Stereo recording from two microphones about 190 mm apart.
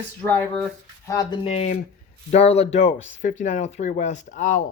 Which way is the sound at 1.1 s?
15° left (ahead or behind).